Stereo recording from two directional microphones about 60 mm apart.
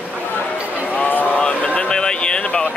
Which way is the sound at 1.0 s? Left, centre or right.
Left.